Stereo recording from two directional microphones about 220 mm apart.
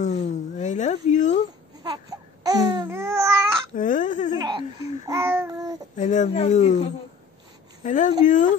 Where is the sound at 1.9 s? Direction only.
15° right (ahead or behind).